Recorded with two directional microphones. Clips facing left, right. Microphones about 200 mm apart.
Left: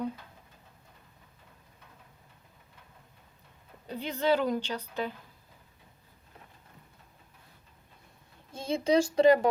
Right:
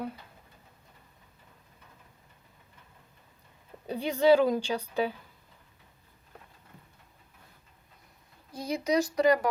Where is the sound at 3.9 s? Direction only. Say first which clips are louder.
Right 6 dB; 15° right (ahead or behind).